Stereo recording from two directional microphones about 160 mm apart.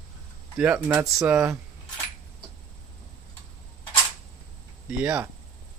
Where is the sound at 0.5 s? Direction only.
10° right (ahead or behind).